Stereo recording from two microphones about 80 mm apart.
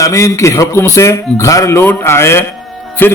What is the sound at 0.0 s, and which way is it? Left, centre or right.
A man's voice, left.